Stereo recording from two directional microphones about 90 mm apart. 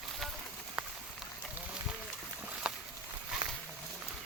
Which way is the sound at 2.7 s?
10° right (ahead or behind).